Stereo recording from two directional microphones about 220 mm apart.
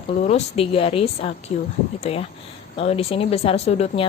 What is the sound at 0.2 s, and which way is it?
A woman's voice, 30° left (ahead or behind).